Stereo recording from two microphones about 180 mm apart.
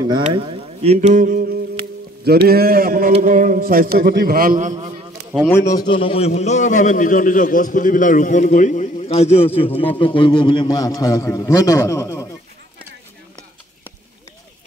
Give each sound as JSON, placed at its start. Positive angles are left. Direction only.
{"t": 0.3, "sound": "a sound", "side_deg": -30}
{"t": 2.2, "sound": "a man's voice", "side_deg": -60}
{"t": 5.7, "sound": "a man's voice", "side_deg": 25}